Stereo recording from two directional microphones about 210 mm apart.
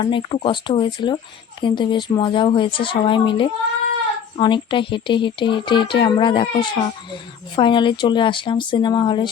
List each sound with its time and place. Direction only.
0.0 s speech: 25° left (ahead or behind)